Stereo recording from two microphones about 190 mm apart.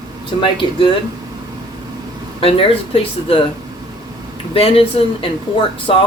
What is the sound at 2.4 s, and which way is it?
Speech, 30° left (ahead or behind).